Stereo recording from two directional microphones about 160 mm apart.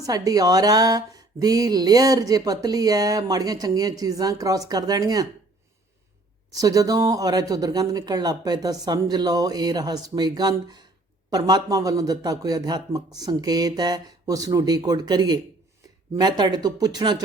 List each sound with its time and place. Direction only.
0.0 s speech: 20° right (ahead or behind)
6.5 s speech: 20° right (ahead or behind)